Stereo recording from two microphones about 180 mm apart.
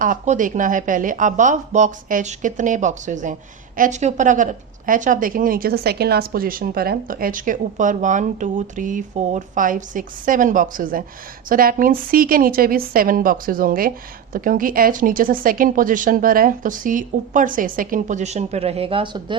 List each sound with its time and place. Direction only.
0.0 s a woman's voice: 45° right (ahead or behind); by 19.4 s 25° right (ahead or behind)